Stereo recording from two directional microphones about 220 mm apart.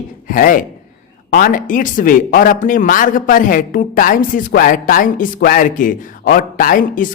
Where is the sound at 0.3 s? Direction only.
40° left (ahead or behind).